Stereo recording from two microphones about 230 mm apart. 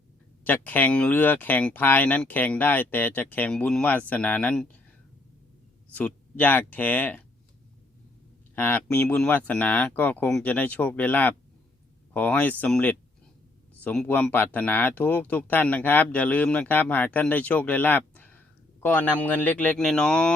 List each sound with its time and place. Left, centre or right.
0.4 s speech: centre
5.9 s speech: centre
8.5 s speech: centre